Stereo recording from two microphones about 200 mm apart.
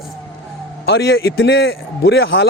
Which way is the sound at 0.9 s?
55° left (ahead or behind).